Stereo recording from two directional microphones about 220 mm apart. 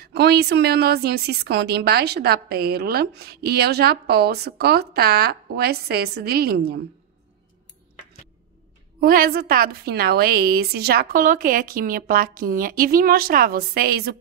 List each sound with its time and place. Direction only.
0.1 s a woman's voice: 50° right (ahead or behind)
9.0 s a woman's voice: 40° right (ahead or behind)